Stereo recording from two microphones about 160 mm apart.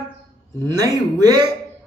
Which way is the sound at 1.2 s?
25° right (ahead or behind).